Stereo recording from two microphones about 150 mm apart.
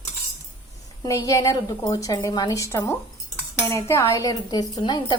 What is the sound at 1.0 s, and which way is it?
A woman's voice, 20° left (ahead or behind).